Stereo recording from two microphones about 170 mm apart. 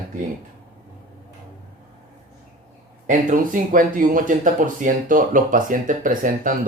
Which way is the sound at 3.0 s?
50° right (ahead or behind).